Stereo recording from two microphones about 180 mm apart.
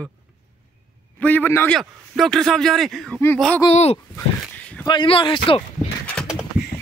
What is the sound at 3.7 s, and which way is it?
Speech, 35° left (ahead or behind).